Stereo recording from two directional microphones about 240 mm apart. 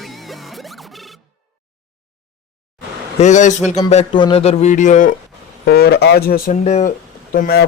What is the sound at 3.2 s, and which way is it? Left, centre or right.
Speech, left.